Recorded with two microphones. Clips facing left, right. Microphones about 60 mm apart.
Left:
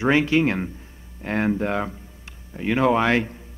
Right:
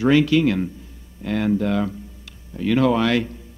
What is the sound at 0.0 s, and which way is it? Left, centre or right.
Speech, left.